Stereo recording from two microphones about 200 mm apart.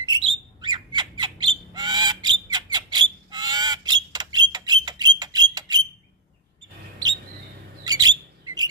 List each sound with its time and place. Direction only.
0.0 s squawk: 20° right (ahead or behind)
7.8 s mouse: 20° right (ahead or behind)